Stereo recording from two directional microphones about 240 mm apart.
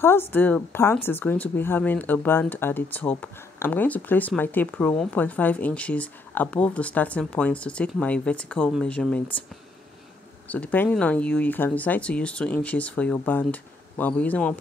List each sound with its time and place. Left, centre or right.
0.0 s a woman's voice: centre
10.5 s speech: centre